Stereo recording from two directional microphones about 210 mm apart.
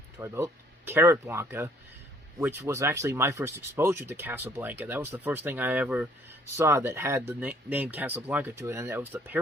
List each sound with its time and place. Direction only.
0.2 s speech: 10° right (ahead or behind)